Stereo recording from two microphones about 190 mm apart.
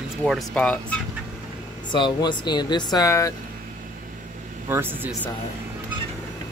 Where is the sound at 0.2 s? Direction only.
Centre (ahead or behind).